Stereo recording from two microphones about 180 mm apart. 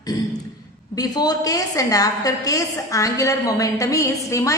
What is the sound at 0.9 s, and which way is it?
A woman's voice, 20° left (ahead or behind).